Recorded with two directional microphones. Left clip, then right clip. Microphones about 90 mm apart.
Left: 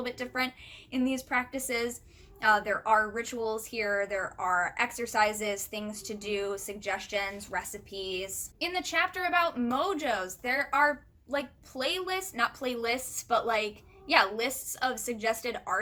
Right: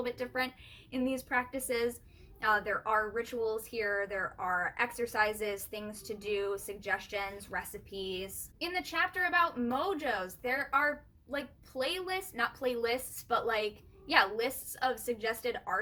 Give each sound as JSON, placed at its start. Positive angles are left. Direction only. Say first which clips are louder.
{"t": 0.0, "sound": "a woman's voice", "louder": "left 2 dB", "side_deg": 30}